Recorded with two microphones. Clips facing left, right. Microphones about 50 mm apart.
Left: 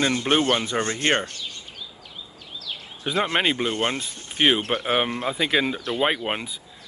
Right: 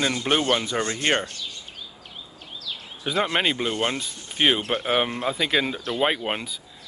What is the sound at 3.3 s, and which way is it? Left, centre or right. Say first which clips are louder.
Speech: left 1 dB; centre.